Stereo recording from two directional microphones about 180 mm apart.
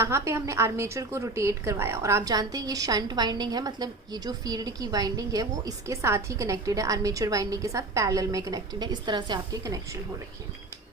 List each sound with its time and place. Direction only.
0.0 s a woman's voice: 15° right (ahead or behind)